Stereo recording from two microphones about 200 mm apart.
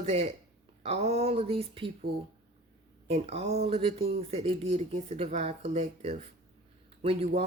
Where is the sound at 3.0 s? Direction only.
30° right (ahead or behind).